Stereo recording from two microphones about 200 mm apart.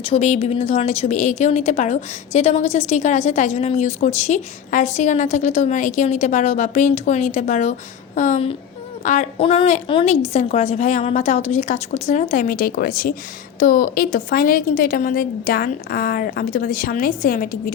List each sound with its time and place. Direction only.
0.0 s a woman's voice: 30° left (ahead or behind)